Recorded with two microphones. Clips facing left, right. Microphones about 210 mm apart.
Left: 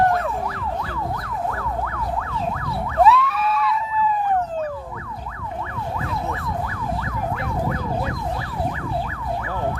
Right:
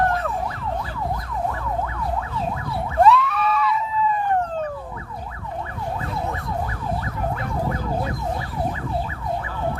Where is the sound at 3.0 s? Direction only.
Centre (ahead or behind).